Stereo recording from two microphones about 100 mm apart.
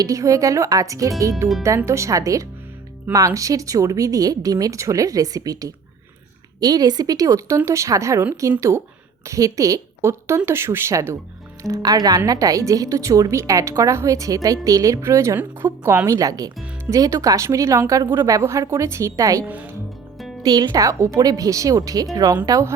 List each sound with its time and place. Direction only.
0.0 s a woman's voice: 35° right (ahead or behind)
19.5 s speech: 15° right (ahead or behind)
20.4 s speech: 45° right (ahead or behind)